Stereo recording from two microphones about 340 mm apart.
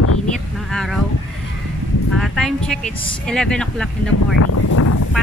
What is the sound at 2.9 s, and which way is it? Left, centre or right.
Speech, centre.